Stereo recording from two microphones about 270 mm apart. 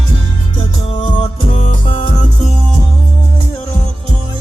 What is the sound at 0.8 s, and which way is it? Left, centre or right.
Music, centre.